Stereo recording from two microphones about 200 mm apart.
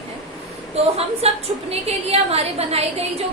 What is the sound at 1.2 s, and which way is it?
A woman's voice, 30° right (ahead or behind).